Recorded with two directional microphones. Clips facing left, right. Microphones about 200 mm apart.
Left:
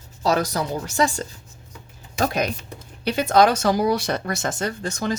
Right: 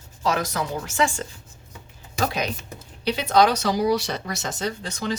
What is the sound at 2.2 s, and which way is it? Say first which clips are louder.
Speech: left 3 dB; 50° left (ahead or behind).